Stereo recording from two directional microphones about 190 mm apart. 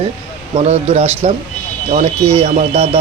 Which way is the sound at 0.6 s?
35° right (ahead or behind).